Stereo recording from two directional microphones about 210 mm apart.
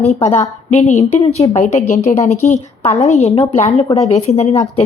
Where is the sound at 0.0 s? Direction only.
30° left (ahead or behind).